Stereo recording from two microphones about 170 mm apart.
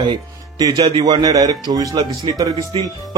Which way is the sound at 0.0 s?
25° right (ahead or behind).